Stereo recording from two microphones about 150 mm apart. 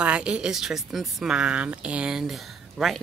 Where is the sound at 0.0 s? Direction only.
5° right (ahead or behind).